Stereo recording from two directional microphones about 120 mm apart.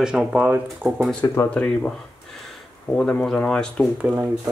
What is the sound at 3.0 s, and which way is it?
Speech, 5° left (ahead or behind).